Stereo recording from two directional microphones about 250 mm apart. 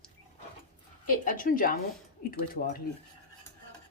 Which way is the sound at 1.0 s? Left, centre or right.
Left.